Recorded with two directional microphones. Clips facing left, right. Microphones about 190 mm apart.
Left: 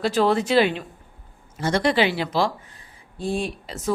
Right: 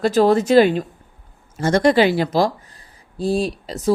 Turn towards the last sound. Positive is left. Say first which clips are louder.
# right 6 dB
turn(degrees=-35)  # may be behind; listen again after turning